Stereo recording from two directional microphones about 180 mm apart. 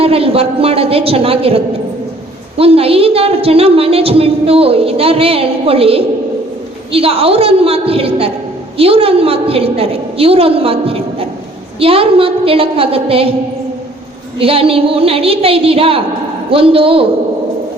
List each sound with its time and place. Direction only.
0.0 s a woman's voice: 30° right (ahead or behind)
14.3 s a woman's voice: 30° right (ahead or behind)